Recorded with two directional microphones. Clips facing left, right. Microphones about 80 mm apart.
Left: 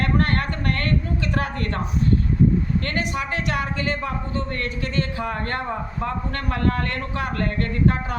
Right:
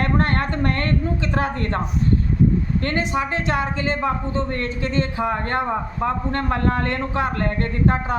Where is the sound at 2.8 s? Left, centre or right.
Right.